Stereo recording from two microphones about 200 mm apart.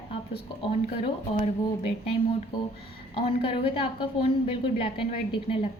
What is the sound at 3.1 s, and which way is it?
A woman's voice, 30° left (ahead or behind).